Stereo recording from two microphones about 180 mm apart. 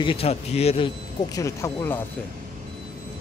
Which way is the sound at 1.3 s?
15° left (ahead or behind).